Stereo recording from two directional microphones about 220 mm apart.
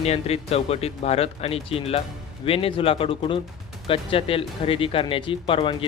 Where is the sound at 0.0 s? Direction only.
30° left (ahead or behind).